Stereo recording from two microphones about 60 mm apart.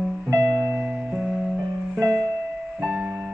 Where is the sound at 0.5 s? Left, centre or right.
Right.